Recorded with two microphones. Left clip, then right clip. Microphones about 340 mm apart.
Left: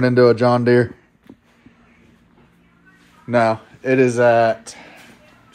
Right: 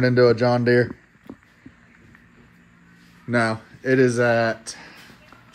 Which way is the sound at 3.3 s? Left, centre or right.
Left.